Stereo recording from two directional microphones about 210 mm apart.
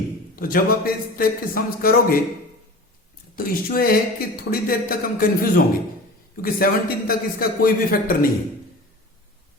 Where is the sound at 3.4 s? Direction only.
45° left (ahead or behind).